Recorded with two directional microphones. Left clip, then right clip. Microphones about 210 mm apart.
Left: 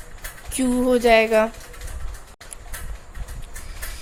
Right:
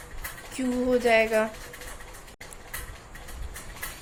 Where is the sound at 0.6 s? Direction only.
40° left (ahead or behind).